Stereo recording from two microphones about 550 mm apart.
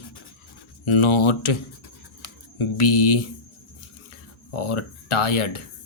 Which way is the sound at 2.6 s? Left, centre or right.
Left.